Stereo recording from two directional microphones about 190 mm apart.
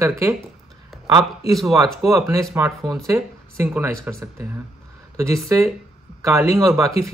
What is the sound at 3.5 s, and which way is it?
Speech, 10° right (ahead or behind).